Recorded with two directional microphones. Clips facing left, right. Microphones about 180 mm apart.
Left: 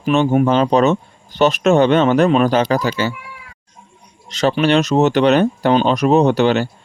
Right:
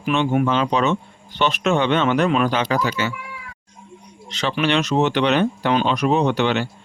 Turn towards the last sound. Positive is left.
turn(degrees=40)  # may be behind; listen again after turning